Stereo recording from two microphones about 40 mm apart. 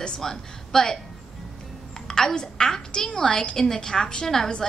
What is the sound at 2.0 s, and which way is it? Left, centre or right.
A woman's voice, centre.